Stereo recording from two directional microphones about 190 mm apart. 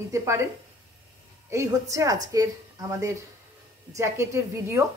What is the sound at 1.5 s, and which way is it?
Speech, 15° right (ahead or behind).